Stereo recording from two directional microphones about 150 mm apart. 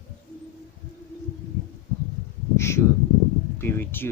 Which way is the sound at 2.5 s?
20° left (ahead or behind).